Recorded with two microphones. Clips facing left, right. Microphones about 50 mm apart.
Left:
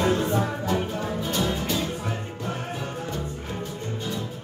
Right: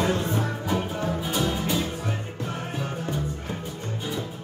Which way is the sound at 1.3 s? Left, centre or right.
Centre.